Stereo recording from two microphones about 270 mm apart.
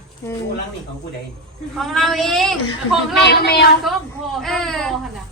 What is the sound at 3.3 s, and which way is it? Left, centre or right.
Speech, left.